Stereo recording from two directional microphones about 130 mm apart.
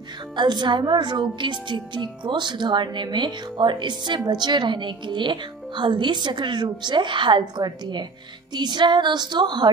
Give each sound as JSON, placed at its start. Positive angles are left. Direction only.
{"t": 0.4, "sound": "a woman's voice", "side_deg": -35}